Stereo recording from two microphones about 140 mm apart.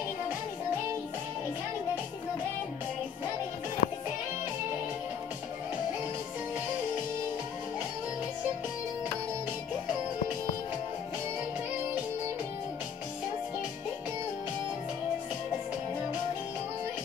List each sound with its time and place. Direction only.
3.8 s music: 75° left (ahead or behind)